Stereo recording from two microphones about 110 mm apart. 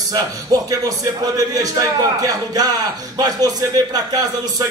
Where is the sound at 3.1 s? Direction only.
35° right (ahead or behind).